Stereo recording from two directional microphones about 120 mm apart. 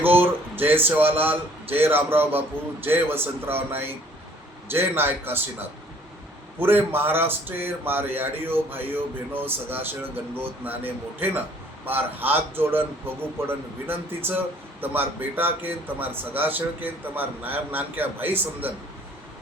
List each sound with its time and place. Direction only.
0.0 s a sound: 15° right (ahead or behind)
1.2 s a man's voice: 15° right (ahead or behind)
6.6 s speech: 20° right (ahead or behind)